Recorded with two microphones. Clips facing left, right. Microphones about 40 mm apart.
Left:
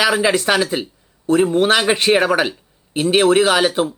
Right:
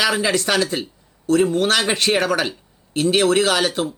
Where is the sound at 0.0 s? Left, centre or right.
Centre.